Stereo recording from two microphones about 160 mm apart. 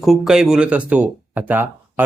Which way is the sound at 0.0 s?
Centre (ahead or behind).